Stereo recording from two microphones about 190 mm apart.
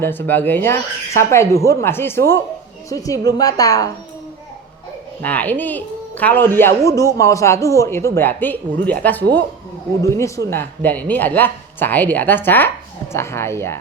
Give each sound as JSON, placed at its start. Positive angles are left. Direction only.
{"t": 0.0, "sound": "a woman's voice", "side_deg": 10}
{"t": 5.2, "sound": "speech", "side_deg": 10}
{"t": 10.0, "sound": "speech", "side_deg": 15}